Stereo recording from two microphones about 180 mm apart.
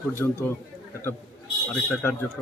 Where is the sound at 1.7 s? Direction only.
5° left (ahead or behind).